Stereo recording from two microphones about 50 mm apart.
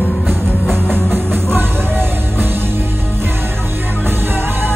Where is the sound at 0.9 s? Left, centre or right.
Right.